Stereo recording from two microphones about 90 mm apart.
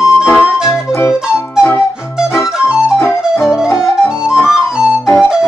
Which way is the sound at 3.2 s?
5° right (ahead or behind).